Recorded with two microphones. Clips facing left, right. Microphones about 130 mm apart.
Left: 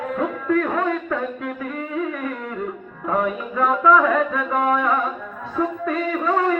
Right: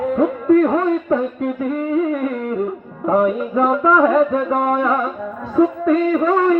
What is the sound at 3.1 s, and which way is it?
Music, 35° right (ahead or behind).